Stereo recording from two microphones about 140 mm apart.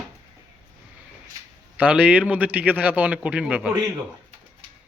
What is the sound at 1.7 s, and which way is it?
A man's voice, 10° right (ahead or behind).